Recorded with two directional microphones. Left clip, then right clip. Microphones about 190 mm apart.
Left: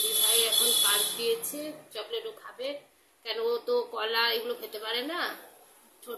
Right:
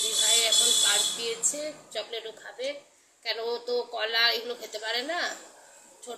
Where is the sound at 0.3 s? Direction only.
Centre (ahead or behind).